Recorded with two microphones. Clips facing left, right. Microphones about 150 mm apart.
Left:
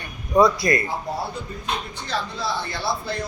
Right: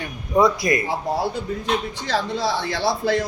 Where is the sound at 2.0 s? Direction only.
90° right.